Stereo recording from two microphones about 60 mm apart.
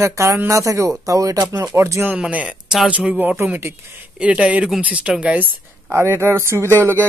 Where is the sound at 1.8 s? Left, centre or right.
Right.